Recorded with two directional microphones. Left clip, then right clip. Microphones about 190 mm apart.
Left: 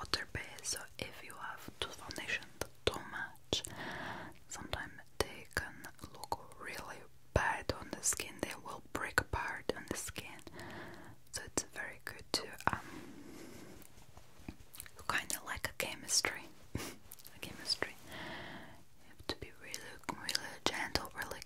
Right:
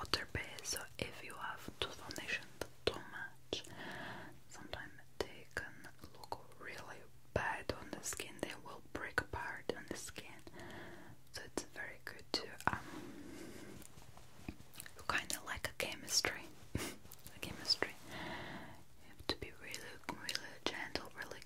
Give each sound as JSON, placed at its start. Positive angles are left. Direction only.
{"t": 0.0, "sound": "whispering", "side_deg": 0}
{"t": 1.9, "sound": "whispering", "side_deg": 15}
{"t": 14.4, "sound": "whispering", "side_deg": 10}
{"t": 20.1, "sound": "whispering", "side_deg": 25}